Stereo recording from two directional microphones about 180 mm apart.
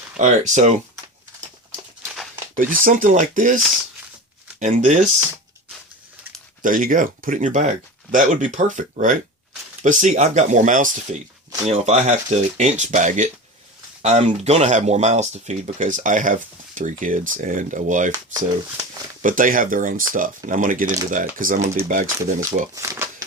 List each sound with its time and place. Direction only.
0.2 s speech: 40° right (ahead or behind)
2.8 s speech: 45° right (ahead or behind)
4.6 s speech: 45° right (ahead or behind)
6.6 s speech: 45° right (ahead or behind)
18.1 s speech: 20° right (ahead or behind)
19.2 s speech: 50° right (ahead or behind)
22.4 s speech: 15° right (ahead or behind)